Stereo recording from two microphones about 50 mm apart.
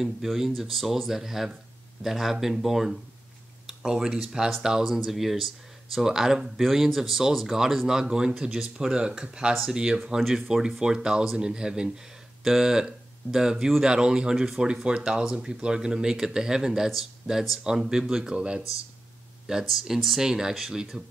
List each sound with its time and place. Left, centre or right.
0.0 s speech: centre
19.4 s speech: centre